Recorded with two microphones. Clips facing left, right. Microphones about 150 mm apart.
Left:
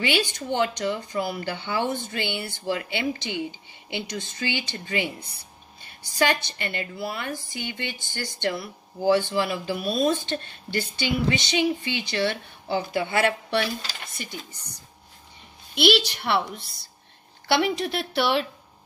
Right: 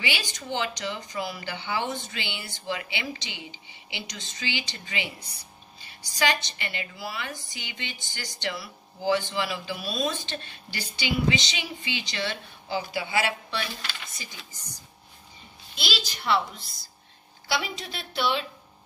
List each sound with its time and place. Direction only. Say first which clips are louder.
0.0 s speech: left 8 dB; 60° left (ahead or behind)